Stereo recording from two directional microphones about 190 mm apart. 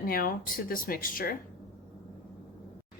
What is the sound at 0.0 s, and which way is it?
Speech, 50° left (ahead or behind).